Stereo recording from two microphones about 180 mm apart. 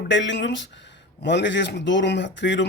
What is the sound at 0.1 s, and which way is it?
Speech, 90° left.